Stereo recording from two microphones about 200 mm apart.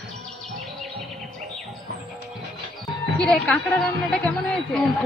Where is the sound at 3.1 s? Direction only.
5° left (ahead or behind).